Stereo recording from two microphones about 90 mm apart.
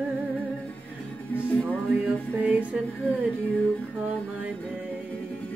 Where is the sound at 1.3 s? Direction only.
15° left (ahead or behind).